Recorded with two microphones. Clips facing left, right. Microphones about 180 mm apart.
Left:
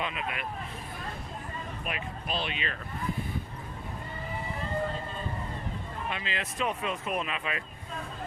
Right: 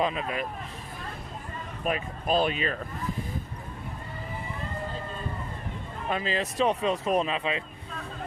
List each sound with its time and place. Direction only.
0.0 s speech: 35° right (ahead or behind)
1.8 s speech: 40° right (ahead or behind)
6.1 s speech: 40° right (ahead or behind)